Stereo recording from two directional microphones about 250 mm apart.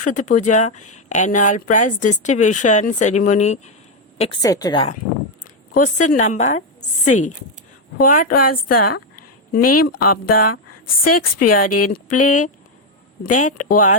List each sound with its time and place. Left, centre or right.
0.0 s speech: left
5.7 s speech: left
7.0 s speech: left
7.9 s speech: left
9.6 s speech: left
9.8 s speech: left
11.6 s speech: left
13.3 s speech: left